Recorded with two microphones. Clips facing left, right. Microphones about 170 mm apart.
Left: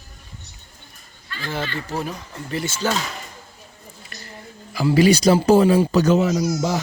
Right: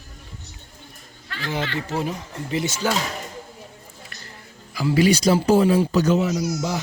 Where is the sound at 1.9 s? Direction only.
20° right (ahead or behind).